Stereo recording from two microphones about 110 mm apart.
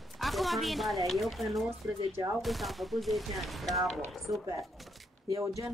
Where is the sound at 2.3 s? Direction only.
Centre (ahead or behind).